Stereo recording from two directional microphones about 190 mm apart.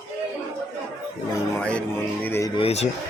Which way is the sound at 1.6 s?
5° left (ahead or behind).